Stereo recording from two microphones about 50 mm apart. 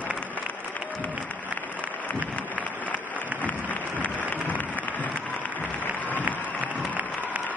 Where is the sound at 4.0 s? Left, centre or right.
Left.